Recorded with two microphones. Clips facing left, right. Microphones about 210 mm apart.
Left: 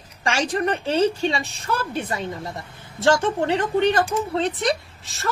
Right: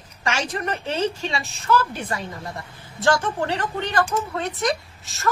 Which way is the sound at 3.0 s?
20° left (ahead or behind).